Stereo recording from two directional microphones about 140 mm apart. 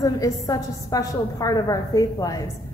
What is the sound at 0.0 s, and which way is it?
A woman's voice, 25° left (ahead or behind).